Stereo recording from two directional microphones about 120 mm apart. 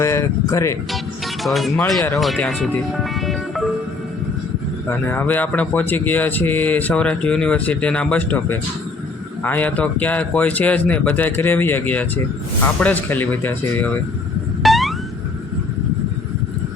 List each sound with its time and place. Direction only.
0.0 s speech: 25° left (ahead or behind)
1.5 s speech: centre (ahead or behind)
3.0 s music: centre (ahead or behind)
4.9 s speech: 15° left (ahead or behind)
14.6 s a sound: centre (ahead or behind)